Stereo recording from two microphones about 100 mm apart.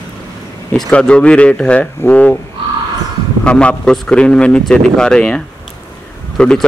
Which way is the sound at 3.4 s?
10° left (ahead or behind).